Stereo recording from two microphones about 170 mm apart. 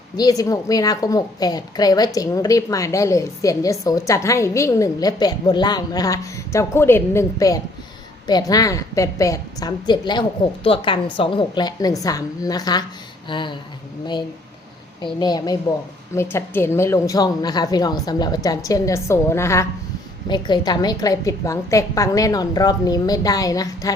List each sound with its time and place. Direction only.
0.2 s a woman's voice: 20° left (ahead or behind)
15.0 s a woman's voice: 25° left (ahead or behind)
16.1 s a woman's voice: 15° left (ahead or behind)